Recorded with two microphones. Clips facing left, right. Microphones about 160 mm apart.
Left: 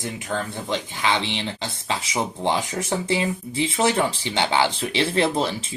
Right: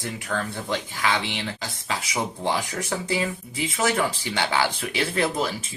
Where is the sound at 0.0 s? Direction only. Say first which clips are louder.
Left 1 dB; 20° left (ahead or behind).